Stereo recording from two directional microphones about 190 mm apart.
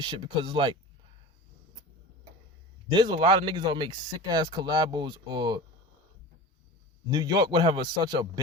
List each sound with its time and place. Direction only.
0.0 s speech: 25° right (ahead or behind)
2.9 s speech: 25° right (ahead or behind)
7.1 s speech: 20° right (ahead or behind)